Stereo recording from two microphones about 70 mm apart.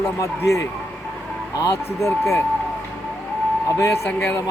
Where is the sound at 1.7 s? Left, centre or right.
Left.